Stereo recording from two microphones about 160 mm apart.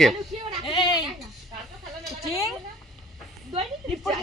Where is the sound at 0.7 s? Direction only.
30° left (ahead or behind).